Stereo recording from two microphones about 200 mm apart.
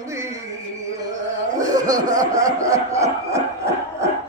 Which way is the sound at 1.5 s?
20° right (ahead or behind).